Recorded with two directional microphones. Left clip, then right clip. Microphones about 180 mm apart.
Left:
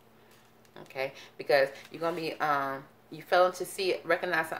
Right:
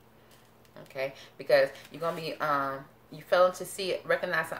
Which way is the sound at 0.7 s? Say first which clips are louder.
Even; 40° left (ahead or behind).